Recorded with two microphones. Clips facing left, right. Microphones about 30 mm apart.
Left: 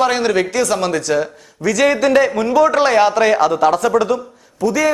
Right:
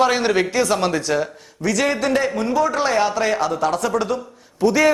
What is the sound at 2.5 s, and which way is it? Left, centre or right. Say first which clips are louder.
Speech: left 6 dB; left.